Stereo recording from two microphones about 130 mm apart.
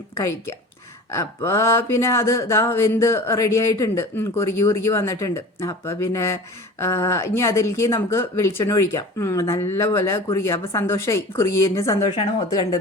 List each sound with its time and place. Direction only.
0.1 s speech: 20° left (ahead or behind)
12.0 s a woman's voice: 40° left (ahead or behind)
12.5 s speech: 30° left (ahead or behind)